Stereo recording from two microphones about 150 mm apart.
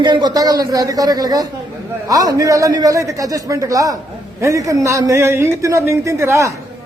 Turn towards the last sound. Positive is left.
turn(degrees=-20)  # may be behind; listen again after turning